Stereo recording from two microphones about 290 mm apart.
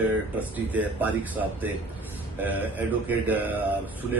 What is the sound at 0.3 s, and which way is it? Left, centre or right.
Speech, centre.